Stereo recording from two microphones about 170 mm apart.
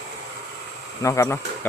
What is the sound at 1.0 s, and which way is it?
Speech, 15° left (ahead or behind).